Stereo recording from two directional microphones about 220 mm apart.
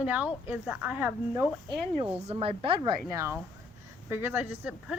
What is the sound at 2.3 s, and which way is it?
A woman's voice, 25° right (ahead or behind).